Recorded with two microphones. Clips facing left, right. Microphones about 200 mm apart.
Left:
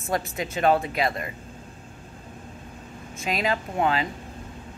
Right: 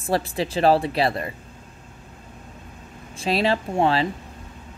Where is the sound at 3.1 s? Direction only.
30° right (ahead or behind).